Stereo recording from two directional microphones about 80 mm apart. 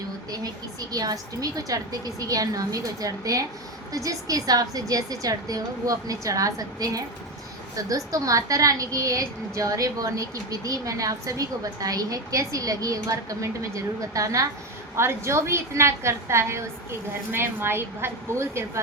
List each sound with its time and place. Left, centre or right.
0.3 s a woman's voice: right